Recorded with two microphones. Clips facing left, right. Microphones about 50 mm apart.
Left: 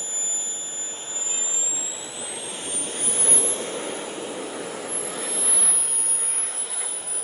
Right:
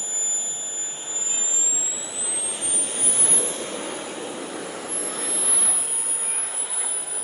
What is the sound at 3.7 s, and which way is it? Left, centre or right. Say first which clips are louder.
Vehicle: even; centre.